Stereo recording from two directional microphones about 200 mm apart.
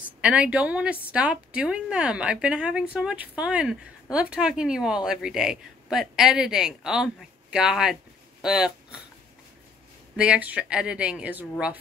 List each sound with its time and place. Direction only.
0.2 s a woman's voice: 5° right (ahead or behind)
10.1 s a woman's voice: 5° right (ahead or behind)